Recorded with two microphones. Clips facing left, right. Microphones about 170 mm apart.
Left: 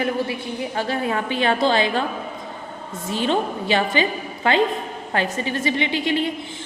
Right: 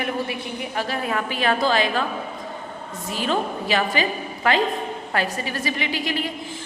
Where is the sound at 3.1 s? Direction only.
30° left (ahead or behind).